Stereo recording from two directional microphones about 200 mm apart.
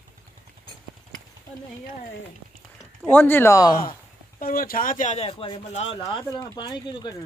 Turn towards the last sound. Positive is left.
turn(degrees=20)  # may be behind; listen again after turning